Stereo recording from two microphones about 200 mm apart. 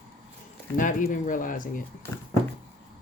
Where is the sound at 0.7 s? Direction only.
40° left (ahead or behind).